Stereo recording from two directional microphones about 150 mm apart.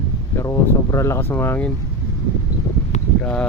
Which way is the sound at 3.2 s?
10° left (ahead or behind).